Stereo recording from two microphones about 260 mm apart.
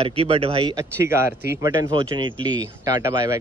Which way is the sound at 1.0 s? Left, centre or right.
Centre.